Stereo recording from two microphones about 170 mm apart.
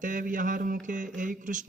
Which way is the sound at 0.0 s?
50° right (ahead or behind).